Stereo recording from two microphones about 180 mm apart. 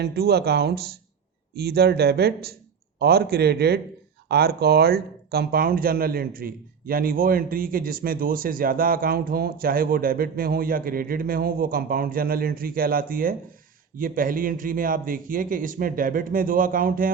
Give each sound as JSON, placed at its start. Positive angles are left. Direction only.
{"t": 0.0, "sound": "speech", "side_deg": -60}